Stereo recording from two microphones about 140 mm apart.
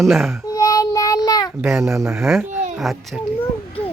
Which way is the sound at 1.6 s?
5° right (ahead or behind).